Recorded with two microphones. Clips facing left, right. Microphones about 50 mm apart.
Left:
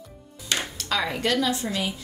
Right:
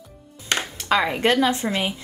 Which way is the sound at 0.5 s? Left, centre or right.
Right.